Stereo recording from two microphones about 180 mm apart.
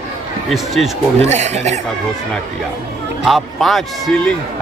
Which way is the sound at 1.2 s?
40° right (ahead or behind).